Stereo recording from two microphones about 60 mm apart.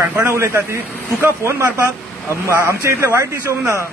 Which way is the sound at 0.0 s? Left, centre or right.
Right.